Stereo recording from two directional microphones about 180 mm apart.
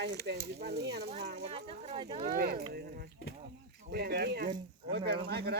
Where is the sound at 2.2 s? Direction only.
55° right (ahead or behind).